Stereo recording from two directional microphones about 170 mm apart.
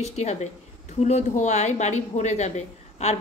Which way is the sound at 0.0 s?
40° left (ahead or behind).